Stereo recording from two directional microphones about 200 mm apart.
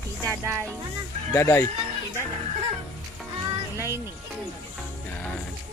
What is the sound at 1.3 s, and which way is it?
Speech, 10° left (ahead or behind).